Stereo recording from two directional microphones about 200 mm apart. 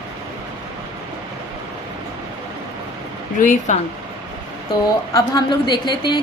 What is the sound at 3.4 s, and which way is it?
Speech, 40° left (ahead or behind).